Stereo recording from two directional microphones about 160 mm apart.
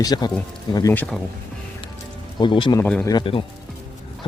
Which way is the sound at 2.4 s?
30° left (ahead or behind).